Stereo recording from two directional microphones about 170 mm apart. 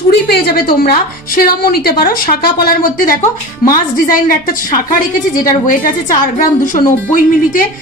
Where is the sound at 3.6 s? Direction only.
55° left (ahead or behind).